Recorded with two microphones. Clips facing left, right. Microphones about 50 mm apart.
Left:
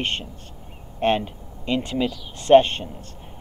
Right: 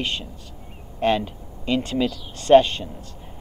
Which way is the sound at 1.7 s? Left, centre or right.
Centre.